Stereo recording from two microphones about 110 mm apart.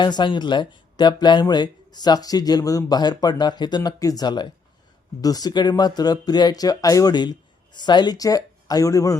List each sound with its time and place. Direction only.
0.0 s speech: 45° left (ahead or behind)